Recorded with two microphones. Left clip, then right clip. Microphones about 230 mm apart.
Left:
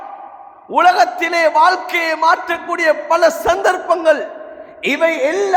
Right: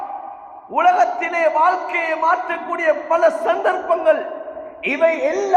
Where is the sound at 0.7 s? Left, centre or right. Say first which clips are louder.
Left 3 dB; left.